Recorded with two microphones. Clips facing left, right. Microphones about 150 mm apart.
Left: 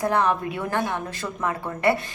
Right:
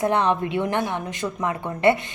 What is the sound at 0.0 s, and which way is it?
A woman's voice, 20° right (ahead or behind).